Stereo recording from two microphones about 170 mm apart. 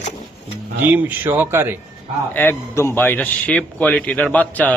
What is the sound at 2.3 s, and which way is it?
A man's voice, 10° left (ahead or behind).